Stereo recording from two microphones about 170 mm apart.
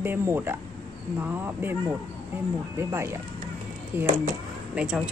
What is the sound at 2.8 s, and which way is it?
Speech, 15° right (ahead or behind).